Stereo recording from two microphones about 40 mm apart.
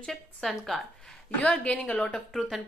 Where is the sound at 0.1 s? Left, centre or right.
Centre.